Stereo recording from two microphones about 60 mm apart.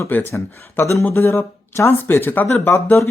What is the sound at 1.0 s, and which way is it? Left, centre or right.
Speech, left.